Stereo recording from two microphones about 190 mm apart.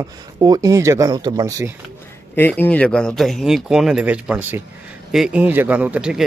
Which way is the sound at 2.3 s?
10° left (ahead or behind).